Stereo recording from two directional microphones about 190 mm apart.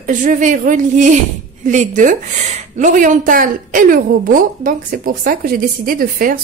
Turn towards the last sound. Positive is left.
turn(degrees=-50)  # may be behind; listen again after turning